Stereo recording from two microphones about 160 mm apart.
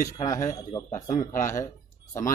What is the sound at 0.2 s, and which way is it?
A man's voice, 20° left (ahead or behind).